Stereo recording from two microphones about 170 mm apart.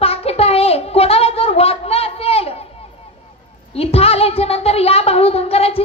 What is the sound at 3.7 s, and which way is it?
A woman's voice, 35° left (ahead or behind).